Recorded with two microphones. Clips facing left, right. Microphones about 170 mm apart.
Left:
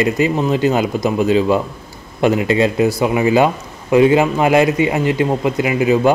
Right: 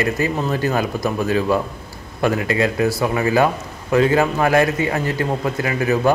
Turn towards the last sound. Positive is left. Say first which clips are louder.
# left 5 dB
turn(degrees=15)  # may be behind; listen again after turning